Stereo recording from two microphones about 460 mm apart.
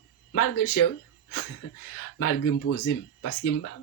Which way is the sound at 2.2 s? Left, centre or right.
Left.